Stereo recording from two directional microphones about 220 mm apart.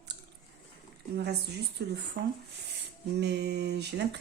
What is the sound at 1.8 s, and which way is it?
Speech, 45° right (ahead or behind).